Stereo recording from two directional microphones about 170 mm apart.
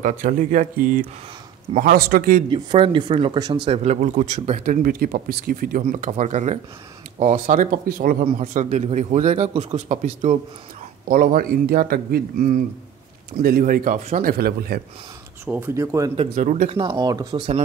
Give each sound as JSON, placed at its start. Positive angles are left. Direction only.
{"t": 0.0, "sound": "speech", "side_deg": -50}
{"t": 1.8, "sound": "a man's voice", "side_deg": -65}
{"t": 2.5, "sound": "speech", "side_deg": -30}
{"t": 4.8, "sound": "speech", "side_deg": -60}
{"t": 11.1, "sound": "a man's voice", "side_deg": -55}
{"t": 15.4, "sound": "speech", "side_deg": -10}
{"t": 16.3, "sound": "speech", "side_deg": -50}
{"t": 16.7, "sound": "speech", "side_deg": -25}